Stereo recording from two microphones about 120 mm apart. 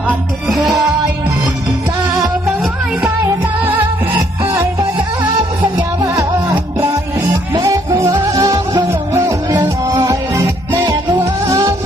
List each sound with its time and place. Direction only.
0.4 s music: centre (ahead or behind)
7.5 s music: 30° right (ahead or behind)